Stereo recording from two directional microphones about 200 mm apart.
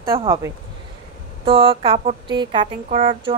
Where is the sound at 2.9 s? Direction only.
40° right (ahead or behind).